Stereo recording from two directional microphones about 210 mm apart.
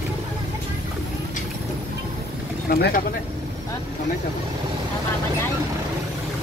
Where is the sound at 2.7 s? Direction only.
45° left (ahead or behind).